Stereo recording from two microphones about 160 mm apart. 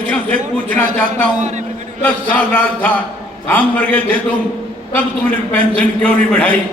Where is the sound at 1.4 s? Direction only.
45° right (ahead or behind).